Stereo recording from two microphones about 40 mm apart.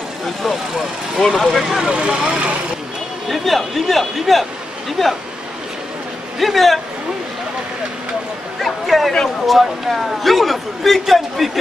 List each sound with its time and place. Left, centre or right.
0.4 s a man's voice: centre
1.9 s speech: right
3.3 s a man's voice: centre
6.4 s a man's voice: centre
8.5 s a man's voice: centre